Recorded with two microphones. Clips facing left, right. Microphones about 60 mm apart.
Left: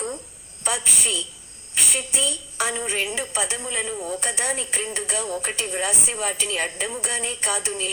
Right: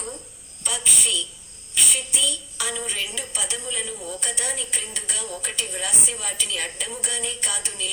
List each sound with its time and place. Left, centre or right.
0.6 s a woman's voice: left